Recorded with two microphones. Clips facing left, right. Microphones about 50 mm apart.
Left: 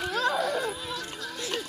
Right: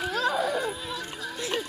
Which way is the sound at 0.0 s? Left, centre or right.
Centre.